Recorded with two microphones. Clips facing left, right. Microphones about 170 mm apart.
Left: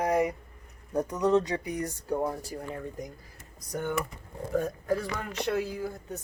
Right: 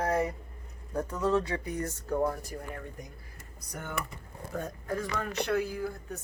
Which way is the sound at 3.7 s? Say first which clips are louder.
Left 8 dB; 25° left (ahead or behind).